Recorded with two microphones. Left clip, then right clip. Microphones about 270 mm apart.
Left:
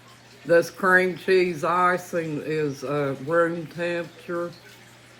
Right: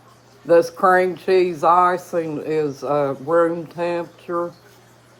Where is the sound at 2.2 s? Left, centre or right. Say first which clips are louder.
Right 5 dB; centre.